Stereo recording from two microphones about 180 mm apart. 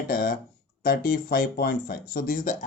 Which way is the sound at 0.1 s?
55° left (ahead or behind).